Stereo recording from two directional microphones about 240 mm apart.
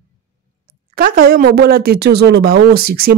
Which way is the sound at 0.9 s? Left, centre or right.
Right.